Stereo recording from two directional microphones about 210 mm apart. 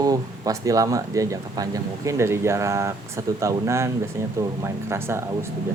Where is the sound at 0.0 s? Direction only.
15° right (ahead or behind).